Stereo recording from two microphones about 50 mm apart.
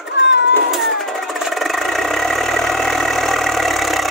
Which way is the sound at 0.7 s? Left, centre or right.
Centre.